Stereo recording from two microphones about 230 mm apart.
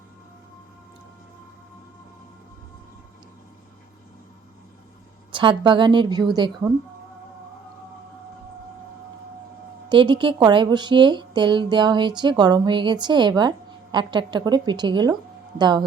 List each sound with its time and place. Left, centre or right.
5.3 s speech: right
9.9 s speech: right